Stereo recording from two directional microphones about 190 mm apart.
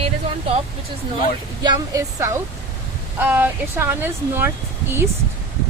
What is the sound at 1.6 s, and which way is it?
Speech, 20° right (ahead or behind).